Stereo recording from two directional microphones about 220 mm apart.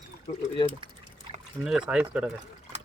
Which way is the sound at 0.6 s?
20° left (ahead or behind).